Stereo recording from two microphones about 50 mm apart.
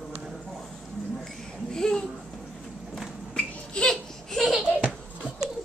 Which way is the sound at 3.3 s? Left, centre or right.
Left.